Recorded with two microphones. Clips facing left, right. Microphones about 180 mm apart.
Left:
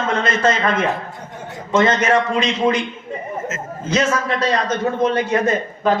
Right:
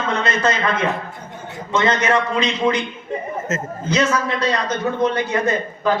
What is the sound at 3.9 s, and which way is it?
A man's voice, 45° left (ahead or behind).